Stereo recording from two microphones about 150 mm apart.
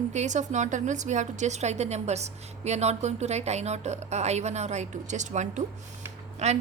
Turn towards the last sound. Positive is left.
turn(degrees=-50)  # may be behind; listen again after turning